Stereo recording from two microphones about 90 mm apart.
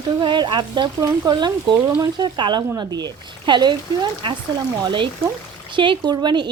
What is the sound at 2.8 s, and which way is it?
Speech, 50° right (ahead or behind).